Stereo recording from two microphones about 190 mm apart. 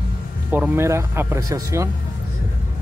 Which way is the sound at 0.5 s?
10° right (ahead or behind).